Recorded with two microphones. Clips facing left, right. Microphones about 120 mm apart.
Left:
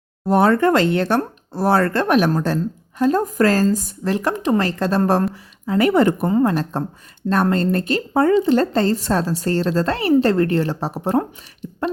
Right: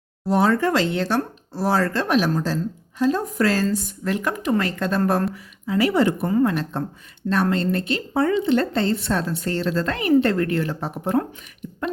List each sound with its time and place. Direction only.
0.3 s a woman's voice: 55° left (ahead or behind); by 5.2 s 35° left (ahead or behind)
5.6 s speech: 50° left (ahead or behind)
6.2 s a woman's voice: 35° left (ahead or behind)
11.6 s a sound: 35° left (ahead or behind)